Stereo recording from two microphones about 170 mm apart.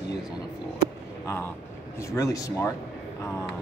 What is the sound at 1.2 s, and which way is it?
Speech, 15° left (ahead or behind).